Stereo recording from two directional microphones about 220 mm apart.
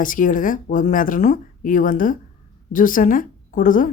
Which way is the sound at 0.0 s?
35° left (ahead or behind).